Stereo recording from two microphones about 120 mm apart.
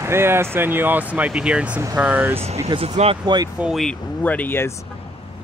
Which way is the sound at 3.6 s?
5° right (ahead or behind).